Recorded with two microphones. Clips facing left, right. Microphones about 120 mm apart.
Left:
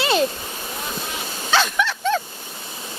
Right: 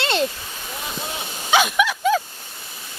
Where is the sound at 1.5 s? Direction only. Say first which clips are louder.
Right 2 dB; 10° right (ahead or behind).